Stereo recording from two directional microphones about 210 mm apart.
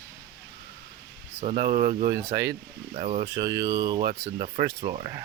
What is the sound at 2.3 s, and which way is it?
Speech, 15° right (ahead or behind).